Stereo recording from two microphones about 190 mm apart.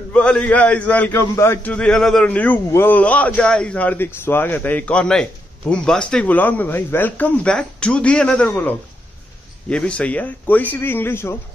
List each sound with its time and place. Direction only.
0.1 s a man's voice: 5° left (ahead or behind)